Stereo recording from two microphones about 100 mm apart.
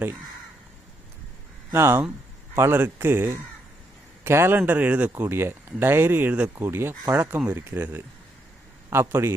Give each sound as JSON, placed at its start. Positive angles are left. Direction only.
{"t": 1.7, "sound": "speech", "side_deg": -25}